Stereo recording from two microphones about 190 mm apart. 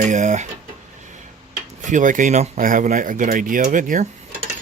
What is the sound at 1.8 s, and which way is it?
Speech, 40° right (ahead or behind).